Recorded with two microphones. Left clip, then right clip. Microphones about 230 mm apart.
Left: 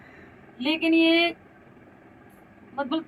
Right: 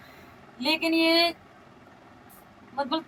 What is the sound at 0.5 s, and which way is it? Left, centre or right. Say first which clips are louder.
Speech: left 2 dB; right.